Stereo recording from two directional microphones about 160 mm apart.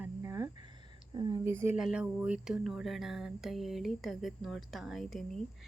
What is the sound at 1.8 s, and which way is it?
Speech, 5° right (ahead or behind).